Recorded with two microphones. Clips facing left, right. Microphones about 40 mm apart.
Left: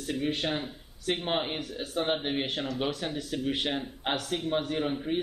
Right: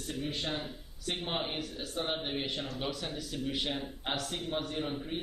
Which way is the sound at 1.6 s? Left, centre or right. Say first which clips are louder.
Left 3 dB; left.